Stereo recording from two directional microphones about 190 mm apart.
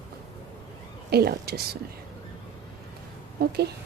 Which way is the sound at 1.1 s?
55° right (ahead or behind).